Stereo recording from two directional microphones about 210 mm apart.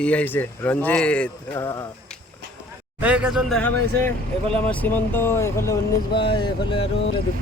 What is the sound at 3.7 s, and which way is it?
Speech, 90° left.